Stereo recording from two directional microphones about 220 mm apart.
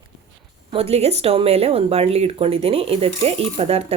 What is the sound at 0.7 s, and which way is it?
Speech, 25° right (ahead or behind).